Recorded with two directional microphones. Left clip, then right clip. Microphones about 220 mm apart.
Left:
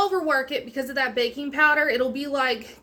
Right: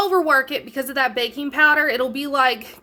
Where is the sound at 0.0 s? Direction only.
45° right (ahead or behind).